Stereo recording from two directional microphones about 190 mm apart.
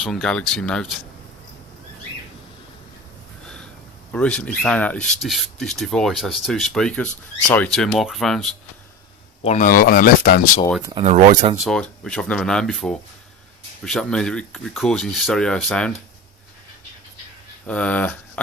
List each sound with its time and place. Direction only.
0.0 s speech: centre (ahead or behind)
3.4 s a sound: 5° left (ahead or behind)
4.1 s speech: 5° left (ahead or behind)
9.4 s speech: 40° left (ahead or behind)
11.0 s speech: 35° right (ahead or behind)
11.5 s speech: centre (ahead or behind)
17.7 s speech: 5° left (ahead or behind)